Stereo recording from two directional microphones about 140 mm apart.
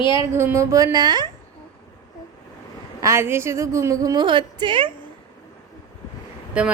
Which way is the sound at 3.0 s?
20° right (ahead or behind).